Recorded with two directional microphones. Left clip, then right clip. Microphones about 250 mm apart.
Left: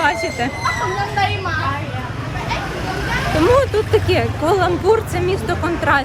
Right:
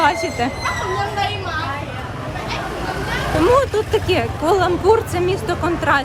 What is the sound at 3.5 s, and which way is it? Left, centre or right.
Speech, centre.